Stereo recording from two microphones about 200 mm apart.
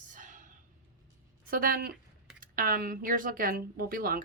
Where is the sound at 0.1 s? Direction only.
40° right (ahead or behind).